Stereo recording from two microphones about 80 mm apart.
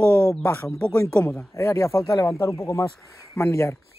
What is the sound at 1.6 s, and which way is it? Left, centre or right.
Speech, left.